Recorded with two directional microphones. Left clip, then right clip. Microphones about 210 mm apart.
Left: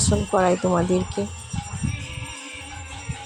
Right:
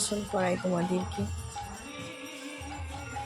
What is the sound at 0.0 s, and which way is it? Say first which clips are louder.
Speech: left 10 dB; 20° left (ahead or behind).